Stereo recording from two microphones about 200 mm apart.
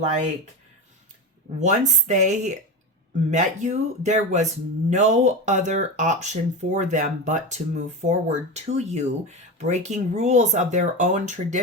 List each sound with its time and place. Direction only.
1.6 s speech: 35° right (ahead or behind)